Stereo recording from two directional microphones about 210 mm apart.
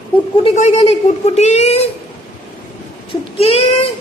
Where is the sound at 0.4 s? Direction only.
35° left (ahead or behind).